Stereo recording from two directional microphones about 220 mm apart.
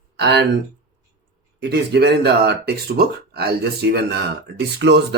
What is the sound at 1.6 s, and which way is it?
Speech, 50° right (ahead or behind).